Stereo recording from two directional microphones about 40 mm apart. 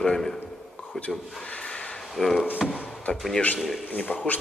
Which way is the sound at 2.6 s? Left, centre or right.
Centre.